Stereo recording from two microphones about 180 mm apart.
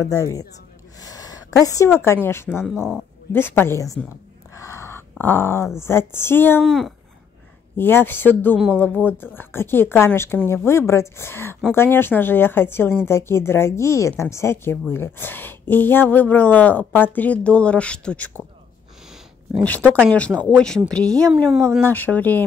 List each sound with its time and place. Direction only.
0.0 s speech: 15° left (ahead or behind)
0.9 s a sound: 20° left (ahead or behind)
2.2 s speech: 15° left (ahead or behind)
4.6 s a sound: 15° left (ahead or behind)
5.1 s speech: 10° left (ahead or behind)
6.6 s speech: centre (ahead or behind)
19.6 s speech: 10° left (ahead or behind)